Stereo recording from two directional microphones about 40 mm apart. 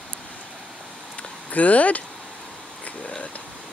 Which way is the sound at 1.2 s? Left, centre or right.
Left.